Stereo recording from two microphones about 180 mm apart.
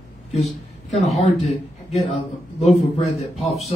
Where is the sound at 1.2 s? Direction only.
35° left (ahead or behind).